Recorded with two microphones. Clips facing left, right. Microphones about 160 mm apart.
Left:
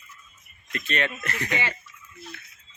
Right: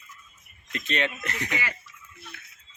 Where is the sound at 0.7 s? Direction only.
20° right (ahead or behind).